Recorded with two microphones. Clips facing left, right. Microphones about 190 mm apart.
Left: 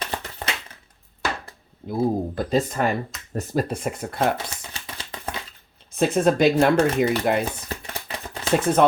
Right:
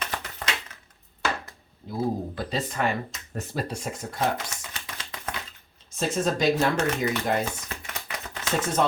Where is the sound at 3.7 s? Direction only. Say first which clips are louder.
Left 5 dB; 55° left (ahead or behind).